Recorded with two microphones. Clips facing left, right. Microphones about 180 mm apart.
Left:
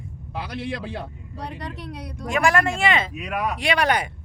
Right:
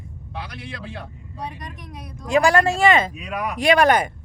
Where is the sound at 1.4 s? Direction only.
70° left (ahead or behind).